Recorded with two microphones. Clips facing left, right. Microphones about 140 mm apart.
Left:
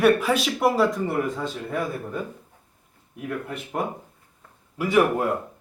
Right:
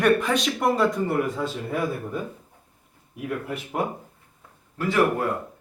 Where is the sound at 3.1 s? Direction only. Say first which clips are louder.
Right 1 dB; 5° right (ahead or behind).